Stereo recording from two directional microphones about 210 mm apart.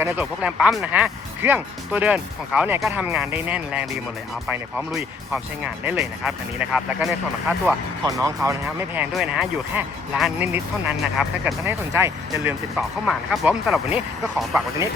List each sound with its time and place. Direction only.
0.0 s speech: 5° right (ahead or behind)
8.0 s speech: 15° right (ahead or behind)
8.6 s speech: centre (ahead or behind)
11.6 s speech: 10° right (ahead or behind)
12.7 s speech: centre (ahead or behind)